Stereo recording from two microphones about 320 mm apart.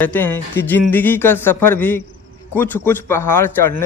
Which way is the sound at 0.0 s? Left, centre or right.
Centre.